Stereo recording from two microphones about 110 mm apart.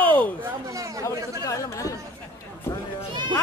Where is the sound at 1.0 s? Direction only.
30° left (ahead or behind).